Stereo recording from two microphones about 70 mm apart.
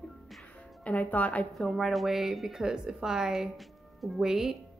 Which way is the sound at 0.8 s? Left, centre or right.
Left.